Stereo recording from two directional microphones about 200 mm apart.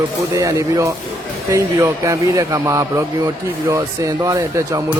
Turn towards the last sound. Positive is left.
turn(degrees=-15)  # may be behind; listen again after turning